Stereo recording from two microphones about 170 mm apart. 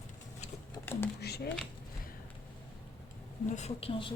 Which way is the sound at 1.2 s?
70° left (ahead or behind).